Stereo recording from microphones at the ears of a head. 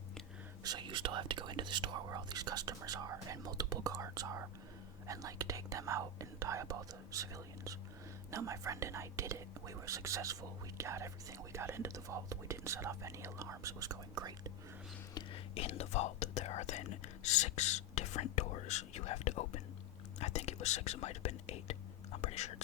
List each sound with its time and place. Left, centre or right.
0.6 s whispering: right
5.0 s speech: right
15.1 s speech: left